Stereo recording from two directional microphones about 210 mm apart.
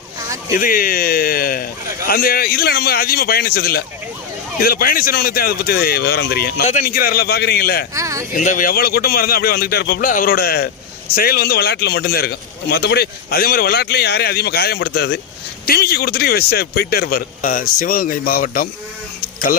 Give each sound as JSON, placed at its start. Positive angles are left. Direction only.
{"t": 0.5, "sound": "a man's voice", "side_deg": 45}
{"t": 7.9, "sound": "speech", "side_deg": -15}
{"t": 8.4, "sound": "a man's voice", "side_deg": 40}